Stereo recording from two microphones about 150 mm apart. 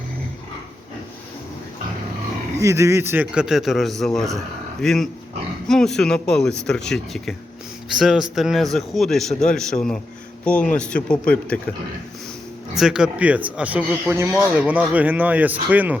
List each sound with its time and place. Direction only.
2.6 s speech: 20° right (ahead or behind); by 11.6 s 10° left (ahead or behind)
12.7 s speech: 5° right (ahead or behind)